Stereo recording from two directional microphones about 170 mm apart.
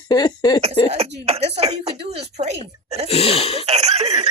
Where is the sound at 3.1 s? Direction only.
35° left (ahead or behind).